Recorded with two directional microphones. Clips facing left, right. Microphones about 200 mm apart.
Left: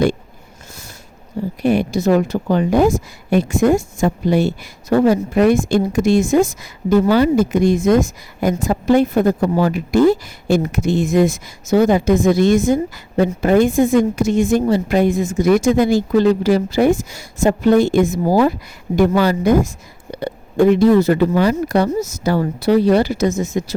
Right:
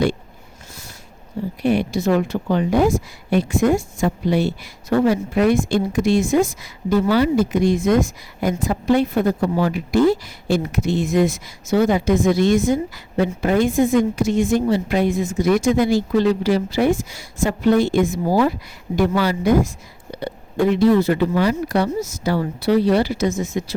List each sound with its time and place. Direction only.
1.6 s a woman's voice: 45° left (ahead or behind)